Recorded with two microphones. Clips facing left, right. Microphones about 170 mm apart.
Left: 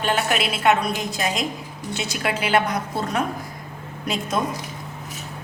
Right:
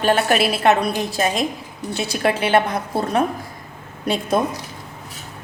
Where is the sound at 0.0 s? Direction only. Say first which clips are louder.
Right 5 dB; 35° right (ahead or behind).